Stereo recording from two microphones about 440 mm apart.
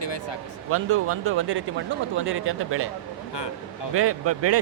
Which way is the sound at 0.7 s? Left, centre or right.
Right.